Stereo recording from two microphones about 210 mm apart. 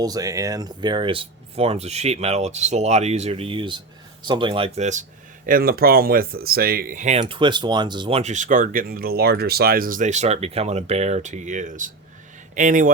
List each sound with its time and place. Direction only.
0.0 s speech: 15° right (ahead or behind); by 5.0 s 35° right (ahead or behind)
5.5 s speech: 45° right (ahead or behind); by 8.2 s 20° right (ahead or behind)
8.2 s speech: 35° right (ahead or behind)